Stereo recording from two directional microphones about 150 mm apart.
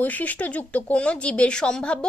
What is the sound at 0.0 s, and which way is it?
A woman's voice, 10° left (ahead or behind).